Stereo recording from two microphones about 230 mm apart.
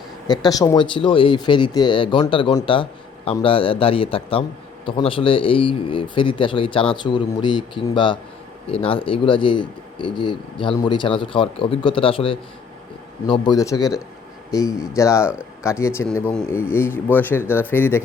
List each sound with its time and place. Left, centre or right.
0.3 s speech: centre